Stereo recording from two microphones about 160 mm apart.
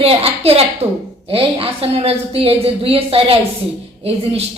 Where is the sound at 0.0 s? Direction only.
40° right (ahead or behind).